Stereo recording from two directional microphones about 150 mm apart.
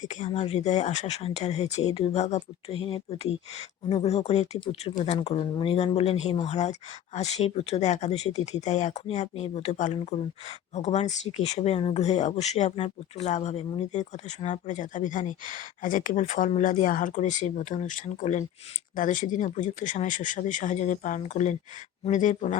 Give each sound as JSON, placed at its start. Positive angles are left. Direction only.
{"t": 0.0, "sound": "speech", "side_deg": 50}